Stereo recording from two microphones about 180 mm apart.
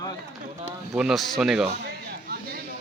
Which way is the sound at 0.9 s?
5° right (ahead or behind).